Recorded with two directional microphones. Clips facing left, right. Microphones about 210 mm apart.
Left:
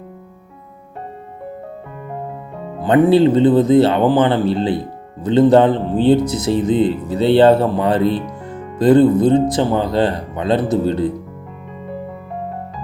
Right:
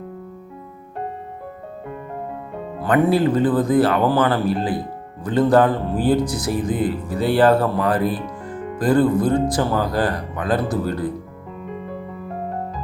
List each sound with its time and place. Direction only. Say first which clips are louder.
2.8 s speech: left 5 dB; 25° left (ahead or behind)